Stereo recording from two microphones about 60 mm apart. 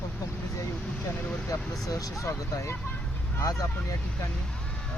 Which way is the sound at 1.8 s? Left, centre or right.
Left.